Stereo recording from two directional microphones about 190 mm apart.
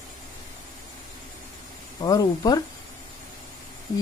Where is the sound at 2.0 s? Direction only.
20° left (ahead or behind).